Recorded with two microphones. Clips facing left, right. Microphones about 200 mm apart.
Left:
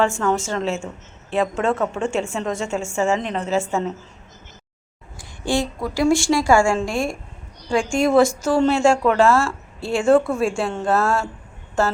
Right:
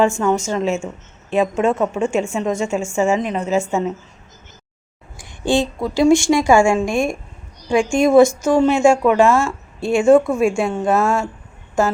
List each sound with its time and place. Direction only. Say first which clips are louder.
0.2 s speech: right 3 dB; 15° right (ahead or behind)
5.1 s a woman's voice: right 4 dB; 20° right (ahead or behind)